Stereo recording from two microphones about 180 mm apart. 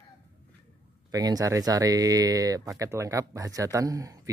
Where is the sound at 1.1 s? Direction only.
20° right (ahead or behind).